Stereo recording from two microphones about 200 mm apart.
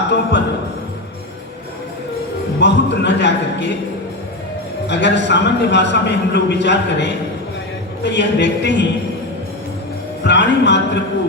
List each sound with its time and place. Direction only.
0.1 s a man's voice: 60° left (ahead or behind)
2.6 s a man's voice: 60° left (ahead or behind)
4.9 s a man's voice: 60° left (ahead or behind)
10.2 s a man's voice: 60° left (ahead or behind)